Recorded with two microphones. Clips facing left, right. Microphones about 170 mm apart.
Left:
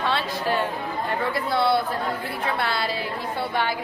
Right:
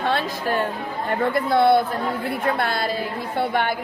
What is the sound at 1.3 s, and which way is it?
Speech, 50° right (ahead or behind).